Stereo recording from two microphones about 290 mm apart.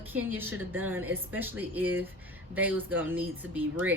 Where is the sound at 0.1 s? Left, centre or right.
Centre.